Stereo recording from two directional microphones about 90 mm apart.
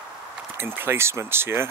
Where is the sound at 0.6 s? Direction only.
25° right (ahead or behind).